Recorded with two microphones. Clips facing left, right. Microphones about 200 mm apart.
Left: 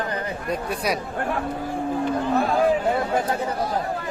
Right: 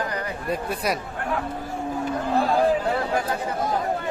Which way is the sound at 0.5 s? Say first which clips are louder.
Left 1 dB; centre (ahead or behind).